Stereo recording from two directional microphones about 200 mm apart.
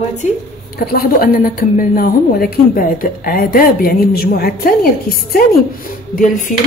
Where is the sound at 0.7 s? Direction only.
45° left (ahead or behind).